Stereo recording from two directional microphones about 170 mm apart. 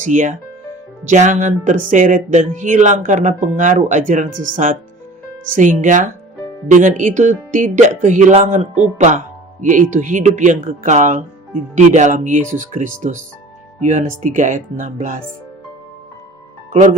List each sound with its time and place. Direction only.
0.0 s music: 50° right (ahead or behind)